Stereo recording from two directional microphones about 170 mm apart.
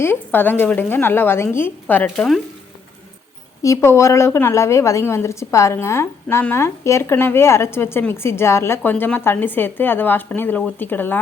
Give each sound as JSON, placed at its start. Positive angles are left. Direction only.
{"t": 0.0, "sound": "a woman's voice", "side_deg": 10}
{"t": 3.6, "sound": "a woman's voice", "side_deg": 15}